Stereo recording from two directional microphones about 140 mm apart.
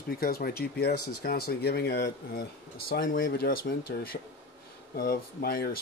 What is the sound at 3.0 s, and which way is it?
Speech, 90° left.